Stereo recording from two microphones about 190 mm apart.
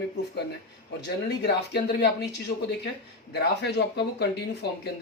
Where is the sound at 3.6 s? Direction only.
60° left (ahead or behind).